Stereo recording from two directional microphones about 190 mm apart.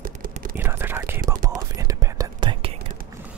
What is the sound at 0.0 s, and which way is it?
Whispering, 45° right (ahead or behind).